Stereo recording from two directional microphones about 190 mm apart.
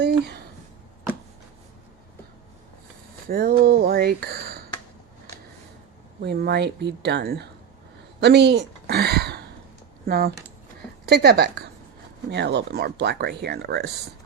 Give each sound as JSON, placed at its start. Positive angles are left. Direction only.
{"t": 3.2, "sound": "speech", "side_deg": -50}
{"t": 6.2, "sound": "a woman's voice", "side_deg": -60}